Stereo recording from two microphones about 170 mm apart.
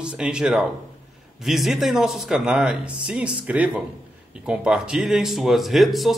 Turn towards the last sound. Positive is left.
turn(degrees=0)  # may be behind; listen again after turning